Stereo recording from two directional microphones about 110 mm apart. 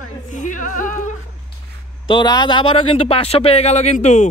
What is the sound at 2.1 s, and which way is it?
Speech, 45° left (ahead or behind).